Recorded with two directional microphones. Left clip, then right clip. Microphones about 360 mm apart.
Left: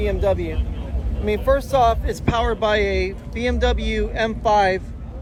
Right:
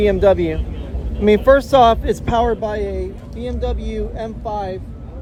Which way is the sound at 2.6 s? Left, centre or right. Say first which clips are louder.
Left 3 dB; centre.